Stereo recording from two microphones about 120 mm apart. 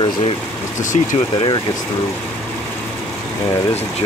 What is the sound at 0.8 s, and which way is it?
Speech, 90° left.